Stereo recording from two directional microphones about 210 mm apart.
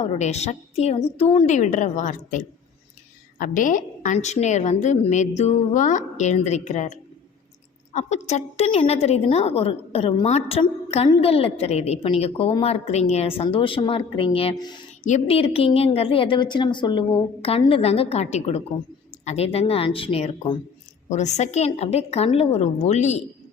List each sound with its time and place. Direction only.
0.0 s a woman's voice: 30° left (ahead or behind)